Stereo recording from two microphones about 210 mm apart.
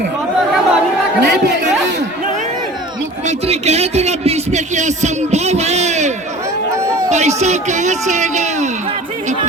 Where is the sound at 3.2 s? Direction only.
30° right (ahead or behind).